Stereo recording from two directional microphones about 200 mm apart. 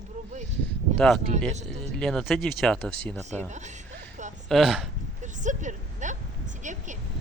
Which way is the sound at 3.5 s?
35° right (ahead or behind).